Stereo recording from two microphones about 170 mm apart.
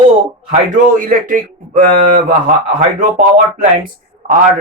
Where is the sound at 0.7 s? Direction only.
50° right (ahead or behind).